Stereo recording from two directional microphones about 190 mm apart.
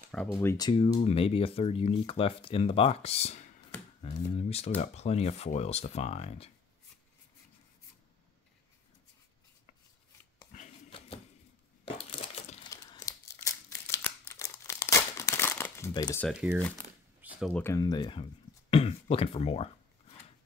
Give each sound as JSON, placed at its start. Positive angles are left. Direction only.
{"t": 0.1, "sound": "speech", "side_deg": 10}
{"t": 10.5, "sound": "a sound", "side_deg": 35}
{"t": 11.8, "sound": "crushing", "side_deg": 30}
{"t": 12.6, "sound": "a sound", "side_deg": 20}
{"t": 16.3, "sound": "speech", "side_deg": -5}
{"t": 16.7, "sound": "shuffling cards", "side_deg": -10}
{"t": 17.5, "sound": "speech", "side_deg": 10}